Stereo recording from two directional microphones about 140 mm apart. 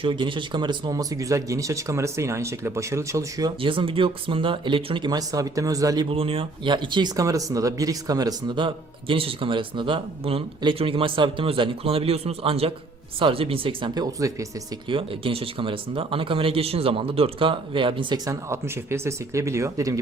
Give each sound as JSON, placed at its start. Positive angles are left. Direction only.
{"t": 0.0, "sound": "speech", "side_deg": -35}
{"t": 3.6, "sound": "speech", "side_deg": -40}
{"t": 6.1, "sound": "speech", "side_deg": -40}
{"t": 14.8, "sound": "speech", "side_deg": -40}
{"t": 18.3, "sound": "speech", "side_deg": -20}